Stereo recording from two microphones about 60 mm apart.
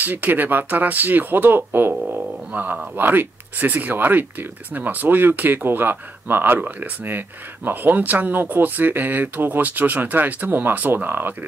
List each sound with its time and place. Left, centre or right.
0.0 s speech: right